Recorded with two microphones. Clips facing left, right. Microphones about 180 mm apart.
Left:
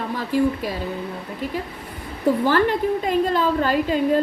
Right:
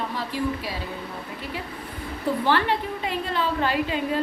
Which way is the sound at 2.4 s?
45° left (ahead or behind).